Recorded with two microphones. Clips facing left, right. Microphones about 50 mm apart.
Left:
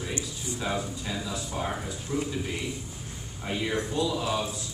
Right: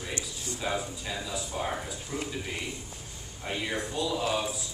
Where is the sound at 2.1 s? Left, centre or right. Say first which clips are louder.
Left 5 dB; right.